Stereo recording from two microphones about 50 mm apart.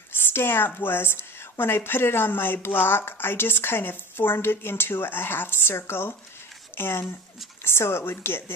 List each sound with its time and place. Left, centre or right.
0.3 s a woman's voice: left